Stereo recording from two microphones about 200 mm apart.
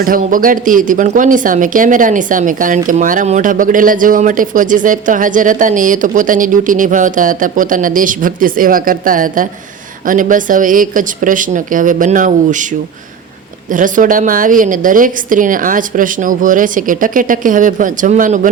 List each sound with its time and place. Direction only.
0.0 s speech: 45° right (ahead or behind)
13.7 s speech: 40° right (ahead or behind)